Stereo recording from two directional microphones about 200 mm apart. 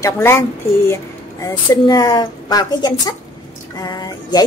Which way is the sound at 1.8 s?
20° left (ahead or behind).